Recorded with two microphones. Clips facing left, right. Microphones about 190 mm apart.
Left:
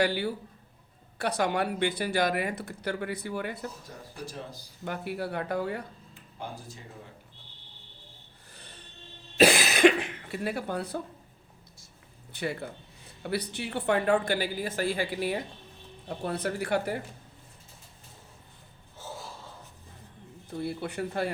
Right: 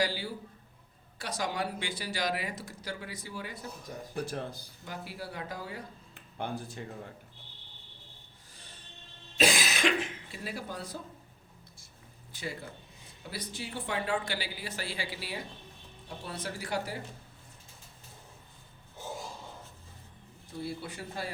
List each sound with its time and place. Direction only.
0.0 s speech: 60° left (ahead or behind)
4.1 s speech: 60° right (ahead or behind)
4.9 s speech: 60° left (ahead or behind)
6.4 s speech: 60° right (ahead or behind)
9.4 s a sound: 65° left (ahead or behind)
12.3 s a woman's voice: 65° left (ahead or behind)
18.9 s a sound: 15° right (ahead or behind)
20.6 s speech: 60° left (ahead or behind)